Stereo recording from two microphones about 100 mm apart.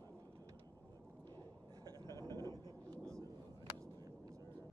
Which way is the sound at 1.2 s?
40° right (ahead or behind).